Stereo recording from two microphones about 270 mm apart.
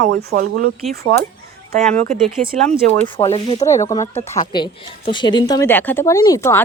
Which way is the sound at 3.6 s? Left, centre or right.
Centre.